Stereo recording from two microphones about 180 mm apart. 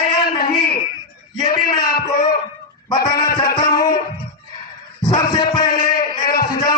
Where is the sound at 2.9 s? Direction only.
20° left (ahead or behind).